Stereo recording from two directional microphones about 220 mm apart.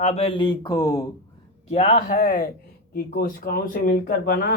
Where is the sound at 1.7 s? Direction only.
30° left (ahead or behind).